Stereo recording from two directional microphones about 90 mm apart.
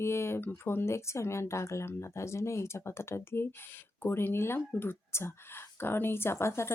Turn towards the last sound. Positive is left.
turn(degrees=30)  # may be behind; listen again after turning